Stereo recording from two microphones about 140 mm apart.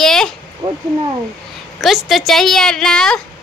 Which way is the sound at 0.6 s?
30° right (ahead or behind).